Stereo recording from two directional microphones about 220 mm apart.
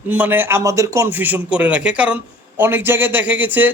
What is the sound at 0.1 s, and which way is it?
Speech, 10° right (ahead or behind).